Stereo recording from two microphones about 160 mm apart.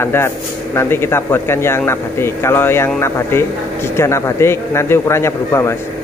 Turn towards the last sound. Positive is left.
turn(degrees=15)  # may be behind; listen again after turning